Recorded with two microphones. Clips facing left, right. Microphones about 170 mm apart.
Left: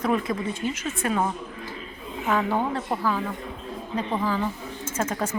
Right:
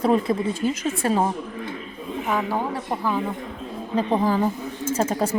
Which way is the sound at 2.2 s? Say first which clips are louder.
Left 1 dB; 10° right (ahead or behind).